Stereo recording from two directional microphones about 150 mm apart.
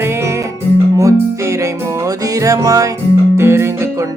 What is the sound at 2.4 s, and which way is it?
Music, 20° right (ahead or behind).